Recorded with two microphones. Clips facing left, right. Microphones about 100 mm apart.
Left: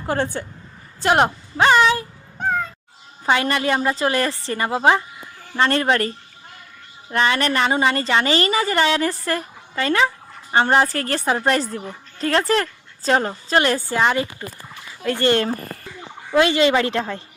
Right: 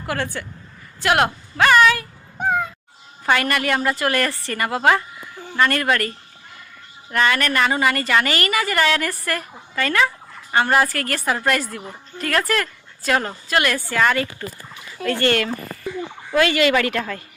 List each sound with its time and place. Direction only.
0.0 s a woman's voice: 25° left (ahead or behind)
2.4 s cat: 10° right (ahead or behind)
3.2 s a woman's voice: 20° left (ahead or behind)